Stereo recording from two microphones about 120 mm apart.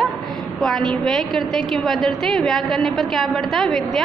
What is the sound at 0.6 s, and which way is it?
A woman's voice, centre (ahead or behind).